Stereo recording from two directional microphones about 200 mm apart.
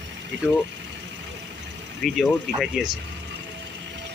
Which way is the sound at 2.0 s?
Centre (ahead or behind).